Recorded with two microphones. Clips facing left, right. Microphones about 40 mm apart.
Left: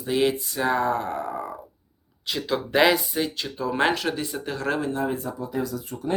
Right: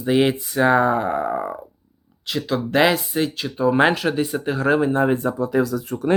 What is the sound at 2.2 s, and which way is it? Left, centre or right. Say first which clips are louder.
Speech: right 3 dB; centre.